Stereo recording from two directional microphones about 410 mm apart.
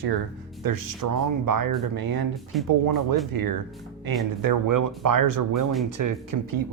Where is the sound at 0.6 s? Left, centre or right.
Right.